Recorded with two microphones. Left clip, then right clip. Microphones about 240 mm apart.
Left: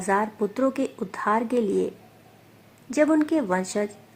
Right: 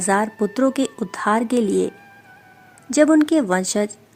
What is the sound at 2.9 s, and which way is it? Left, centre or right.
Speech, right.